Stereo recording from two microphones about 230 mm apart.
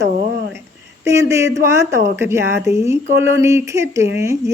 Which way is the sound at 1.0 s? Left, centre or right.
Centre.